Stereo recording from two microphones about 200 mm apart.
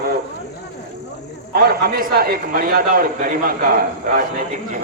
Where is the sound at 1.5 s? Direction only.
50° right (ahead or behind).